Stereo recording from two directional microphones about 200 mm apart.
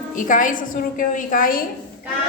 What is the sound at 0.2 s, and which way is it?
A woman's voice, 40° left (ahead or behind).